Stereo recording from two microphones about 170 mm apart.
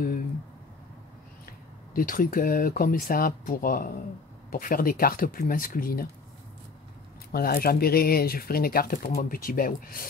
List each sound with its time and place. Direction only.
2.0 s speech: 55° left (ahead or behind)
7.3 s speech: 60° left (ahead or behind)